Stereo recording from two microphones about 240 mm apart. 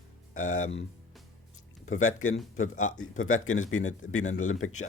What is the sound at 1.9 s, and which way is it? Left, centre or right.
Speech, left.